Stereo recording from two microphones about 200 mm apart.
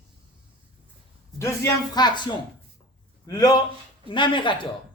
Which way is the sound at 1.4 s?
15° left (ahead or behind).